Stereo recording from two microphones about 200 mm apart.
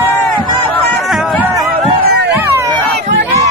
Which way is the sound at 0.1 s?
10° left (ahead or behind).